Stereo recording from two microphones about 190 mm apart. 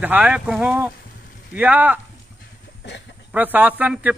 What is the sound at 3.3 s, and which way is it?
Speech, 10° right (ahead or behind).